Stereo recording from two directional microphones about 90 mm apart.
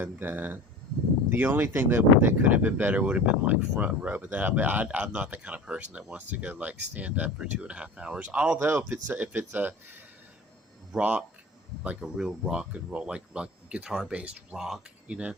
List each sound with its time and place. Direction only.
0.0 s speech: 20° right (ahead or behind)
8.5 s speech: 25° right (ahead or behind)